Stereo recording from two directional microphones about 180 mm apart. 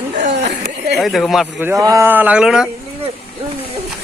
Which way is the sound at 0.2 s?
45° right (ahead or behind).